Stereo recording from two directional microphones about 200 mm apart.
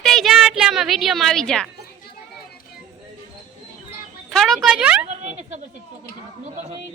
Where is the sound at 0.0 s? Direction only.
Centre (ahead or behind).